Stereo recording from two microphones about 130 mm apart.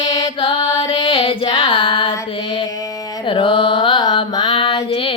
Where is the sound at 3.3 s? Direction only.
40° left (ahead or behind).